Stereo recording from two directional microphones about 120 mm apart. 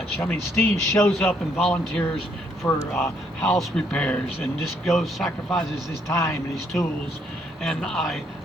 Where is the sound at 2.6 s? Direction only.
20° left (ahead or behind).